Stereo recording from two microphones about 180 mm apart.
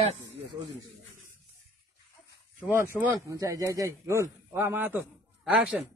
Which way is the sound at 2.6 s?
10° right (ahead or behind).